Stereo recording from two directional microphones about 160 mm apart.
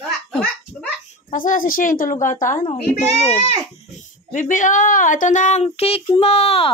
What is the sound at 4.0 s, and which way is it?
Speech, 50° left (ahead or behind).